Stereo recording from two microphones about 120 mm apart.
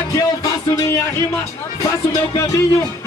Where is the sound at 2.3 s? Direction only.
25° left (ahead or behind).